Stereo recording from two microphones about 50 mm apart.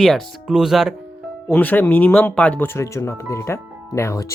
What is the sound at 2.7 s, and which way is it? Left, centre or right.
Speech, left.